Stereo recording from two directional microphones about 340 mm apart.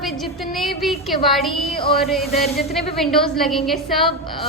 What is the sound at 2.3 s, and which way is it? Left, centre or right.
Speech, centre.